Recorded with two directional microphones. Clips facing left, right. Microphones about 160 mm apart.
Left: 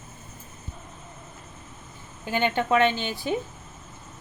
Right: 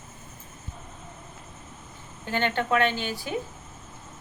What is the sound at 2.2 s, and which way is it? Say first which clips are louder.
Speech: left 2 dB; 10° left (ahead or behind).